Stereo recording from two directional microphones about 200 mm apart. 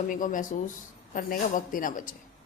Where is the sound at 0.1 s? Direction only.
40° left (ahead or behind).